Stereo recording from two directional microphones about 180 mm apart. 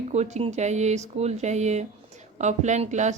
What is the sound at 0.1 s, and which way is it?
Speech, 40° right (ahead or behind).